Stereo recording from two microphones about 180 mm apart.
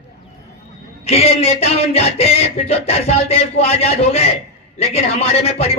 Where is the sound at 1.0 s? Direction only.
35° left (ahead or behind).